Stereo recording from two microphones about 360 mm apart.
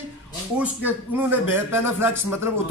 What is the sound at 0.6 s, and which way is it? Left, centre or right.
A man's voice, centre.